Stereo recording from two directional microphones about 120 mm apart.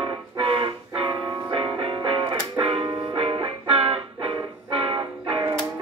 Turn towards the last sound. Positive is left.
turn(degrees=-45)  # may be behind; listen again after turning